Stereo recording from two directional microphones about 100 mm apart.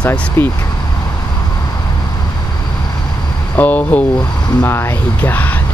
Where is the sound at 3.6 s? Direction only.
15° left (ahead or behind).